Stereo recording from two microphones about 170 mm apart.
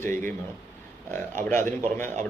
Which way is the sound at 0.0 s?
15° left (ahead or behind).